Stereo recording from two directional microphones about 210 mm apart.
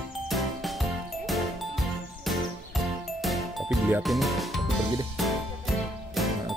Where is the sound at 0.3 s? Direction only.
Centre (ahead or behind).